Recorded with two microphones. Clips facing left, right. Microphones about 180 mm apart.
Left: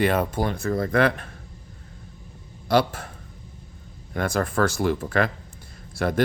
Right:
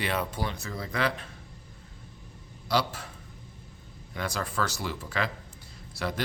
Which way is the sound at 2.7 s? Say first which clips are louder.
Left 7 dB; 50° left (ahead or behind).